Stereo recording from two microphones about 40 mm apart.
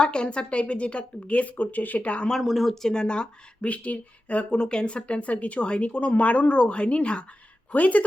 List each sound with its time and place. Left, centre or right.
0.0 s a woman's voice: left
2.4 s speech: centre
2.9 s speech: left
3.7 s a woman's voice: left
4.5 s a woman's voice: left